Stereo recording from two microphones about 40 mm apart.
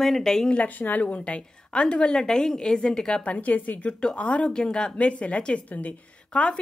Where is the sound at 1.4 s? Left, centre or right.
Centre.